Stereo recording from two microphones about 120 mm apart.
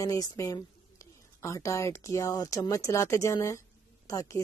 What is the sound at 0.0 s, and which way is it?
Speech, 35° left (ahead or behind).